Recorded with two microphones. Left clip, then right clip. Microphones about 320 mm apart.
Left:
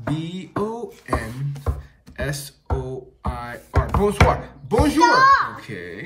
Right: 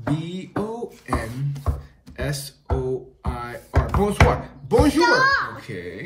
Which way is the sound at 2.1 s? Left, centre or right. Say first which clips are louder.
Left 1 dB; centre.